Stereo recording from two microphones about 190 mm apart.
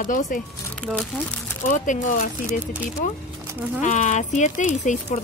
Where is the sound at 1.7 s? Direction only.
40° left (ahead or behind).